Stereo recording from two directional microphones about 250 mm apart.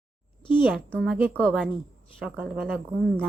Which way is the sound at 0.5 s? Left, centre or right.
Centre.